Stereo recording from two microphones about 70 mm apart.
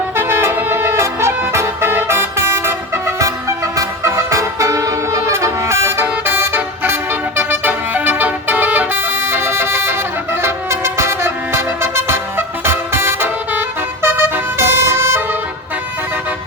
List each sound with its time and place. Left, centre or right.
0.2 s music: right